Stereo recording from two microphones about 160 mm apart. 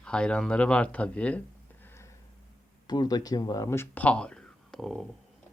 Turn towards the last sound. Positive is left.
turn(degrees=0)  # may be behind; listen again after turning